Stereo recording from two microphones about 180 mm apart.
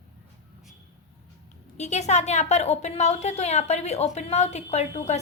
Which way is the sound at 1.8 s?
40° left (ahead or behind).